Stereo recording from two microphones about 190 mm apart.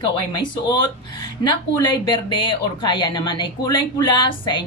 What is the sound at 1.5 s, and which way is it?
A woman's voice, 25° left (ahead or behind).